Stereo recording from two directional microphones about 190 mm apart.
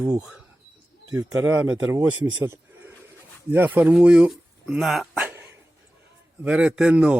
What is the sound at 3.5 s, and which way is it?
Speech, 10° right (ahead or behind).